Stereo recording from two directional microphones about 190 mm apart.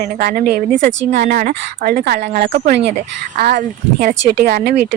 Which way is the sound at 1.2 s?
45° right (ahead or behind).